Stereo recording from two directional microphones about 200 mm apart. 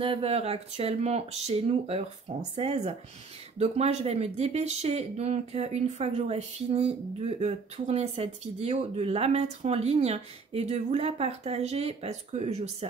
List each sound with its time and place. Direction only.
0.0 s speech: 30° right (ahead or behind)